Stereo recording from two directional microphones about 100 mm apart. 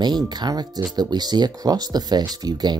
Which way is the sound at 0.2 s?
40° right (ahead or behind).